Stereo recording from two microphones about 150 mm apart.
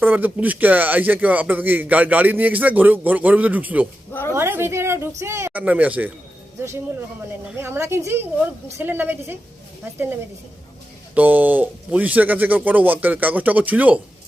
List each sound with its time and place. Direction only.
0.0 s a woman's voice: 10° right (ahead or behind)
7.5 s speech: 15° right (ahead or behind)
11.1 s speech: 10° right (ahead or behind)